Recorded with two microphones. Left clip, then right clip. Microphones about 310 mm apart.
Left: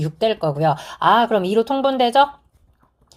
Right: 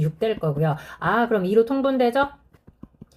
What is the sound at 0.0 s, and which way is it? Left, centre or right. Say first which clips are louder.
A woman's voice: left 5 dB; centre.